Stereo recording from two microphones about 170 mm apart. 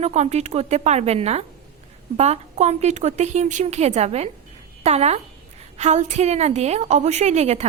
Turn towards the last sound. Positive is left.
turn(degrees=-40)  # may be behind; listen again after turning